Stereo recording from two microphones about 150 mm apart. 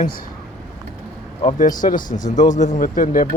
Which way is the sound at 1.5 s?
65° left (ahead or behind).